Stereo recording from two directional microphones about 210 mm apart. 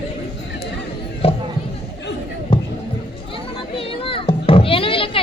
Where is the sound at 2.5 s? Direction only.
25° left (ahead or behind).